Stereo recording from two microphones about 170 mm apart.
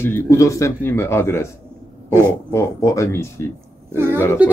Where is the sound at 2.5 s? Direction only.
20° left (ahead or behind).